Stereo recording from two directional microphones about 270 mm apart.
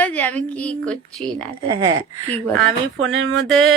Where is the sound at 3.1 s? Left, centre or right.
Right.